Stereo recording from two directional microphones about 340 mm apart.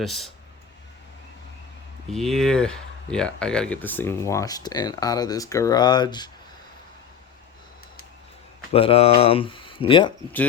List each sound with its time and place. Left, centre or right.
0.0 s speech: centre
2.0 s speech: centre
8.7 s speech: centre